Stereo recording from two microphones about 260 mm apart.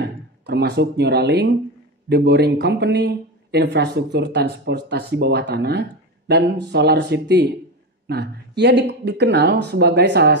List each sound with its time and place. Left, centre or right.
0.5 s speech: right